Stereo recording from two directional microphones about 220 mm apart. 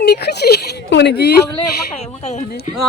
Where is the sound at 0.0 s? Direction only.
45° left (ahead or behind).